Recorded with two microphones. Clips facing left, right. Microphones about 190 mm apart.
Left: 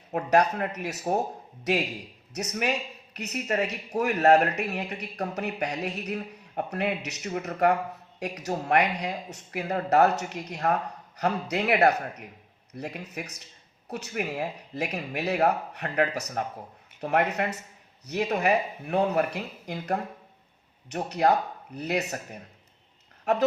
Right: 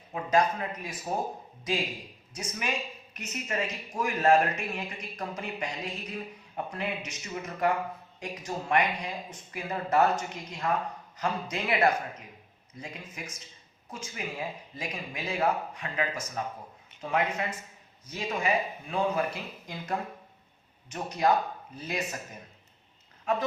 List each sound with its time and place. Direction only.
0.1 s a woman's voice: 65° left (ahead or behind)